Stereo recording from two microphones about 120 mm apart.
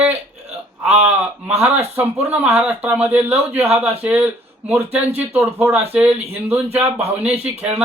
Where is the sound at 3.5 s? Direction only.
60° right (ahead or behind).